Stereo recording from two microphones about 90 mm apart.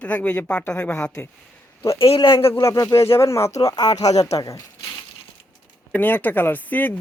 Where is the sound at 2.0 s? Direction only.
85° left.